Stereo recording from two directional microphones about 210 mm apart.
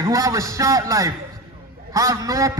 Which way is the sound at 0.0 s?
15° right (ahead or behind).